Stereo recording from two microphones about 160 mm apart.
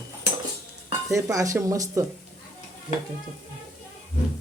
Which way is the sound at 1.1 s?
20° right (ahead or behind).